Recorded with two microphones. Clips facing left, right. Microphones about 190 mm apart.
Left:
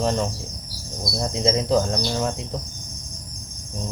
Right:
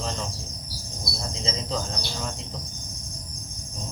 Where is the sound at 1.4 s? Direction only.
60° left (ahead or behind).